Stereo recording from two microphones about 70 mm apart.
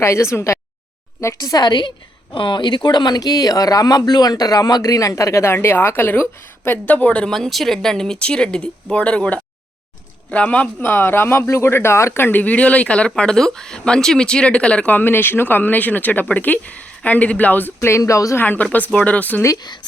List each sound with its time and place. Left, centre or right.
0.0 s speech: left
1.4 s a woman's voice: left; by 7.3 s centre
7.3 s speech: centre
10.8 s speech: left
17.7 s speech: left
18.3 s speech: left